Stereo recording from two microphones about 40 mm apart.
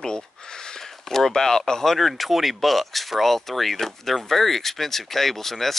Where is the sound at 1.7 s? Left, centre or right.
Centre.